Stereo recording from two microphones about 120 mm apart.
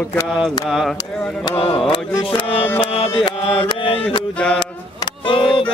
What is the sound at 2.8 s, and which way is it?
Music, 50° left (ahead or behind).